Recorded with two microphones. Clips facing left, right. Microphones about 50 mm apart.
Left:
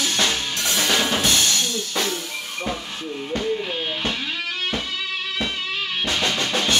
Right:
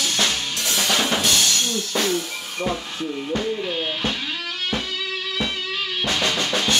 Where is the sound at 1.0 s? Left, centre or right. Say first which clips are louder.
Even; left.